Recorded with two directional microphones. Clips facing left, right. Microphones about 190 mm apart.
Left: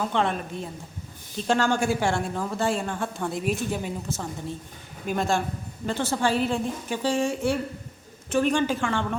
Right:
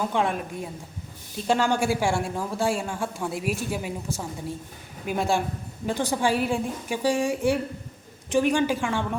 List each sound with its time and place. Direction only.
0.1 s a woman's voice: 10° right (ahead or behind)